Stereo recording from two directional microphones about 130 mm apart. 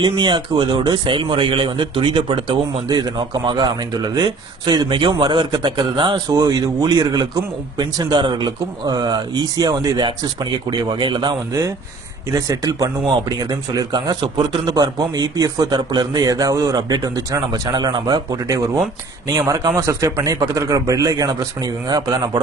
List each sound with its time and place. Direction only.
0.0 s speech: 35° right (ahead or behind)
6.1 s a man's voice: 30° right (ahead or behind)